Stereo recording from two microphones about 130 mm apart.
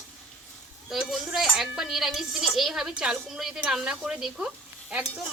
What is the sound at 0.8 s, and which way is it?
Speech, 5° right (ahead or behind).